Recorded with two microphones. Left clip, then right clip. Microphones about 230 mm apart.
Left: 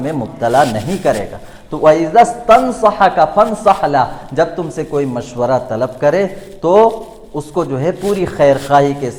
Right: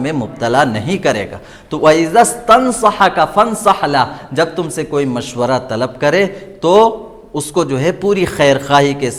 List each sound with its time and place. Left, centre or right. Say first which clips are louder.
0.0 s a man's voice: even; right